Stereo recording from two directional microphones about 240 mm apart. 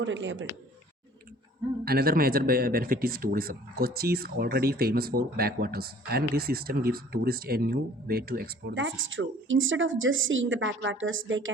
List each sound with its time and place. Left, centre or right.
0.0 s speech: right
1.8 s speech: right